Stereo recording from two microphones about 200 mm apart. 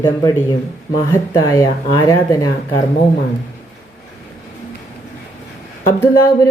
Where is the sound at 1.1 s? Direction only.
15° left (ahead or behind).